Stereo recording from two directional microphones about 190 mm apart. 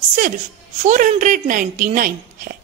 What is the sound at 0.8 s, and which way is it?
A woman's voice, 40° right (ahead or behind).